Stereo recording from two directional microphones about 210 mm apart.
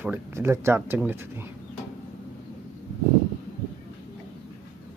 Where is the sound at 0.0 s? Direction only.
10° right (ahead or behind).